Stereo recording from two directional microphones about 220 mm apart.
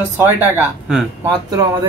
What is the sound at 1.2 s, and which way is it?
Speech, 15° right (ahead or behind).